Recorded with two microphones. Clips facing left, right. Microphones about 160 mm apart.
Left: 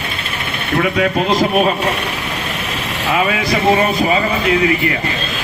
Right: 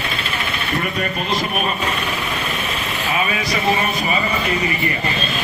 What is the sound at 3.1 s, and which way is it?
Vehicle, 90° left.